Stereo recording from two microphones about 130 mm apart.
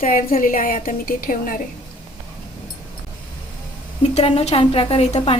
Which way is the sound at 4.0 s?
50° left (ahead or behind).